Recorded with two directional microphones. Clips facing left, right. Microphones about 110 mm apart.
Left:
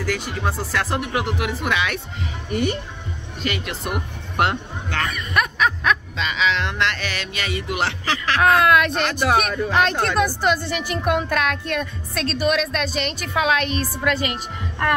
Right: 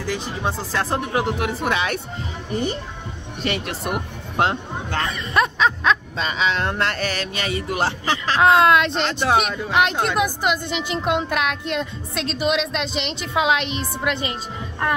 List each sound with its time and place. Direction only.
0.1 s speech: 20° right (ahead or behind)
0.7 s speech: 30° right (ahead or behind)
3.4 s speech: 40° right (ahead or behind)
4.4 s music: 30° right (ahead or behind)
6.1 s speech: 40° right (ahead or behind)
8.0 s speech: 20° right (ahead or behind)